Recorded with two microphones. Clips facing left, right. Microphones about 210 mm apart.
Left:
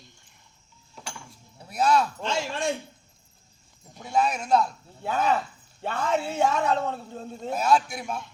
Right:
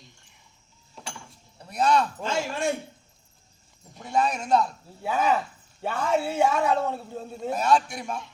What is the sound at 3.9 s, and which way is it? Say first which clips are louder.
A man's voice: even; centre (ahead or behind).